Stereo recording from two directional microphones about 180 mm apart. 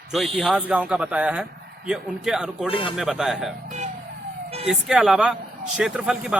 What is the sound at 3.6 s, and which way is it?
Music, 40° right (ahead or behind).